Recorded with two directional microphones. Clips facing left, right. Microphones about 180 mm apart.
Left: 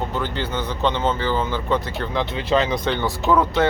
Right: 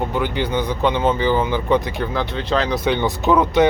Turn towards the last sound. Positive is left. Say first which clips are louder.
# right 3 dB
turn(degrees=-20)  # may be behind; listen again after turning